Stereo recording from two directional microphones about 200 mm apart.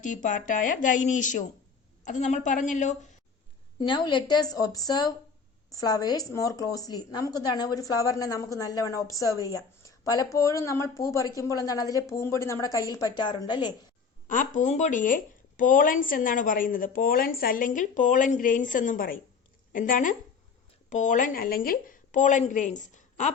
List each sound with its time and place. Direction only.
0.0 s a woman's voice: 40° left (ahead or behind)
3.8 s a woman's voice: 20° left (ahead or behind)
14.3 s a woman's voice: 40° left (ahead or behind)